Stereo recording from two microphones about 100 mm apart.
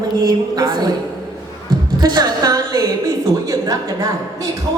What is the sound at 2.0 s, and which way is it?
A woman's voice, 40° right (ahead or behind).